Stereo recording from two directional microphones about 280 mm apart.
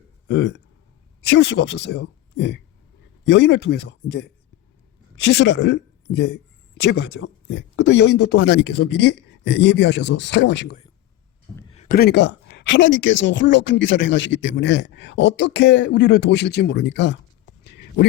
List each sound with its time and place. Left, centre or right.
0.3 s speech: left
11.7 s speech: left